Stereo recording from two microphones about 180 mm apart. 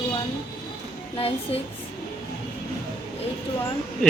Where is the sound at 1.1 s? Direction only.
35° left (ahead or behind).